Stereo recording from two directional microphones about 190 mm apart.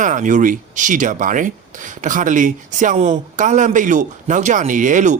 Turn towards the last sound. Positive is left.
turn(degrees=-40)  # may be behind; listen again after turning